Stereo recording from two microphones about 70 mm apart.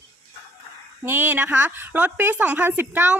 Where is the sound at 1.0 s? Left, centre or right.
Right.